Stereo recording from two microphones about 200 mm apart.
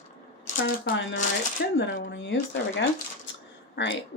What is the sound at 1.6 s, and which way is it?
Speech, 65° left (ahead or behind).